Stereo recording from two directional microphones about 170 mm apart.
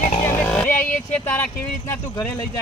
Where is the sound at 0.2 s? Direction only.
10° left (ahead or behind).